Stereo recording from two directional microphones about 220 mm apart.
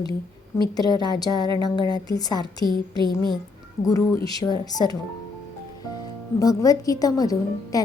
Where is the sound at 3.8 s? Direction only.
15° left (ahead or behind).